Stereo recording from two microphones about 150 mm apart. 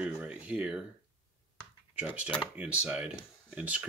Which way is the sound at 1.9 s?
10° right (ahead or behind).